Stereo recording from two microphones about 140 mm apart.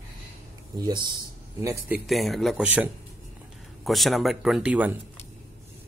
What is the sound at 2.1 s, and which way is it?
Speech, centre (ahead or behind).